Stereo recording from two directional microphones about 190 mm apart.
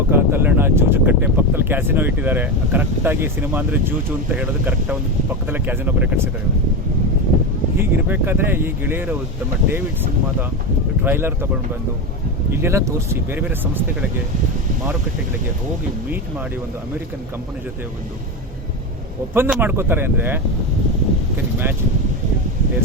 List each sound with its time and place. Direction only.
0.1 s speech: 10° right (ahead or behind)
7.8 s speech: 10° right (ahead or behind)
11.0 s speech: 10° right (ahead or behind)
12.6 s speech: 15° right (ahead or behind)
19.3 s speech: 10° right (ahead or behind)